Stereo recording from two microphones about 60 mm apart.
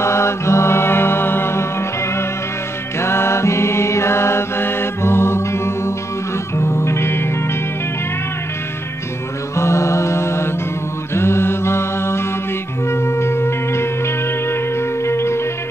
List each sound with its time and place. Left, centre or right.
0.0 s mantra: left
3.0 s mantra: left
6.6 s music: left
9.6 s mantra: left
12.9 s music: left